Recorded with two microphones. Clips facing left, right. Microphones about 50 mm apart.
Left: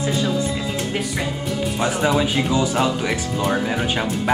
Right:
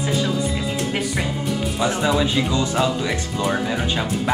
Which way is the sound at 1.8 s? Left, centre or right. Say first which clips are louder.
Left 1 dB; centre.